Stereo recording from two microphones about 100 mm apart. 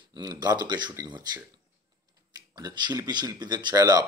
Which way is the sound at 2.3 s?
40° right (ahead or behind).